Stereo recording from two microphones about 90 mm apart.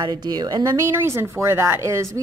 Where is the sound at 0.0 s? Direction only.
50° right (ahead or behind).